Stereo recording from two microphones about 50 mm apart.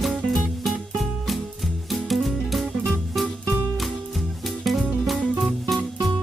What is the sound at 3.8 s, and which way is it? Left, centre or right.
Music, centre.